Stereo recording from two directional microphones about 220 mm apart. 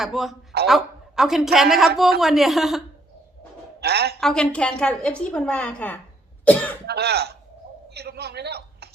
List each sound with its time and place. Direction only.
0.0 s a woman's voice: centre (ahead or behind)
3.8 s a man's voice: 45° right (ahead or behind)
4.2 s a woman's voice: 5° left (ahead or behind)
6.4 s cough: 5° left (ahead or behind)
6.8 s a man's voice: 45° right (ahead or behind)